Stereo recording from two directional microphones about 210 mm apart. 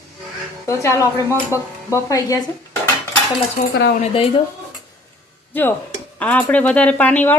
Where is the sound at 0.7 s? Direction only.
15° left (ahead or behind).